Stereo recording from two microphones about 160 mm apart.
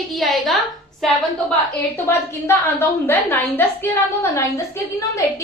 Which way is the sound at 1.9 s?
15° left (ahead or behind).